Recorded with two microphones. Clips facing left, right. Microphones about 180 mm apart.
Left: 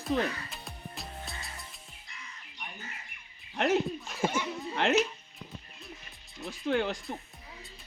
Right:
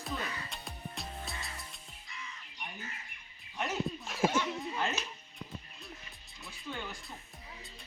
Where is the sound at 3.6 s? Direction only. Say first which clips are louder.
Left 9 dB; 90° left.